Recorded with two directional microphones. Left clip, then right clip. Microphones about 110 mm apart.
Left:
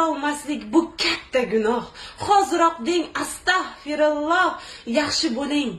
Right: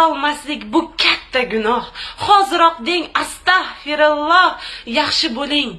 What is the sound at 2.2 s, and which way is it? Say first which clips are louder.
A woman's voice: right 6 dB; 25° left (ahead or behind).